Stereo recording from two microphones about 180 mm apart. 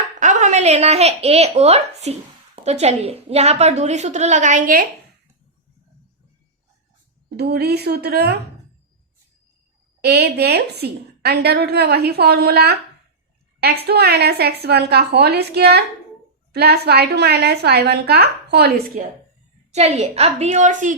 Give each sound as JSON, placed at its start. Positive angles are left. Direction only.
{"t": 0.2, "sound": "a woman's voice", "side_deg": -40}
{"t": 7.3, "sound": "a woman's voice", "side_deg": -65}
{"t": 10.0, "sound": "a woman's voice", "side_deg": -65}
{"t": 19.7, "sound": "a woman's voice", "side_deg": -35}